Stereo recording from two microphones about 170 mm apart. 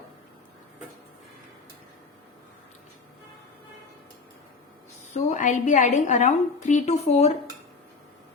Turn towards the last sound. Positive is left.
turn(degrees=40)  # may be behind; listen again after turning